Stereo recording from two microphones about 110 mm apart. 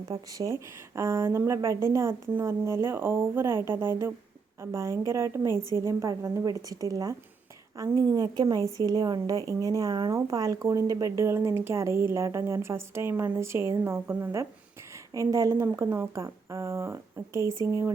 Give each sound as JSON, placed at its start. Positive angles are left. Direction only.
{"t": 0.1, "sound": "speech", "side_deg": -30}